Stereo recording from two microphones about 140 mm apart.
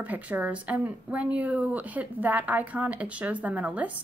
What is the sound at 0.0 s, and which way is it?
A woman's voice, 10° right (ahead or behind).